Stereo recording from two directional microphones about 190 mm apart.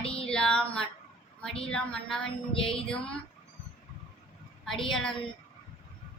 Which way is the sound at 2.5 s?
30° left (ahead or behind).